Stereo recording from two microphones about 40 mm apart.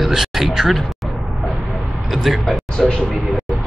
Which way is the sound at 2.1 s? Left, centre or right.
Centre.